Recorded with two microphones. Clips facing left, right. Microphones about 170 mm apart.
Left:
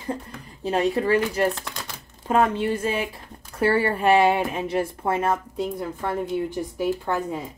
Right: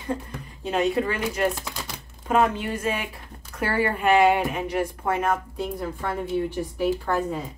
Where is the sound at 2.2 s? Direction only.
30° left (ahead or behind).